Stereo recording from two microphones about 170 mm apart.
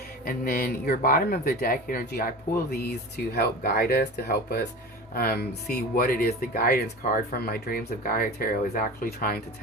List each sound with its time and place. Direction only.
0.3 s speech: 60° left (ahead or behind)